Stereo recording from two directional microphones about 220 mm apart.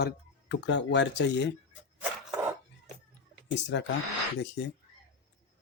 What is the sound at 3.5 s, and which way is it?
Speech, 50° left (ahead or behind).